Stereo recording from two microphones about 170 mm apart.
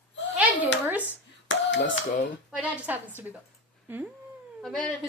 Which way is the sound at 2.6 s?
10° right (ahead or behind).